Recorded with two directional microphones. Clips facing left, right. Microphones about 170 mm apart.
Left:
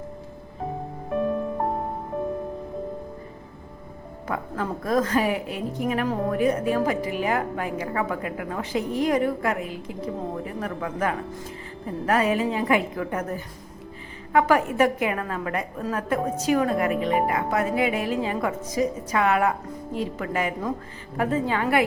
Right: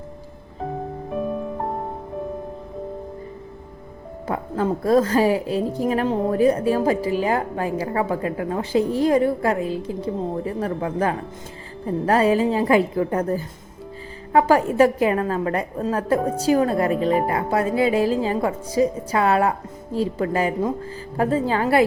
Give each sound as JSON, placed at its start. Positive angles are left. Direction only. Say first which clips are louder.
{"t": 4.3, "sound": "a woman's voice", "louder": "right 6 dB", "side_deg": -30}